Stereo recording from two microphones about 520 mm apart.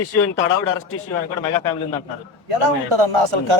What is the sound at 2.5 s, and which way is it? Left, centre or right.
A man's voice, right.